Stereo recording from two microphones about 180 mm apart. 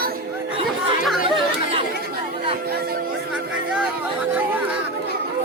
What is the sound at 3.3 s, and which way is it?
Chatter, 5° right (ahead or behind).